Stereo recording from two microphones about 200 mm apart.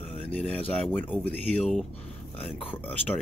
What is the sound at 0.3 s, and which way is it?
Speech, 5° left (ahead or behind).